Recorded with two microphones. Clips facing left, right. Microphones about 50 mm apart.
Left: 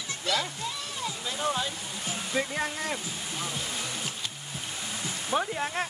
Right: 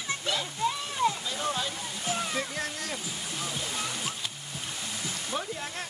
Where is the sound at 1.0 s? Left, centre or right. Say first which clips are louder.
Right 10 dB; right.